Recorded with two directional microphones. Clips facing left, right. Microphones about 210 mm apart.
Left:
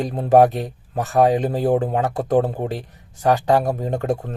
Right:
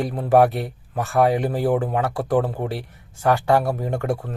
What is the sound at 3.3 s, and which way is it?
Speech, 40° left (ahead or behind).